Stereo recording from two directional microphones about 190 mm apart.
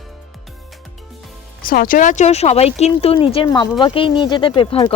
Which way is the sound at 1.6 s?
50° left (ahead or behind).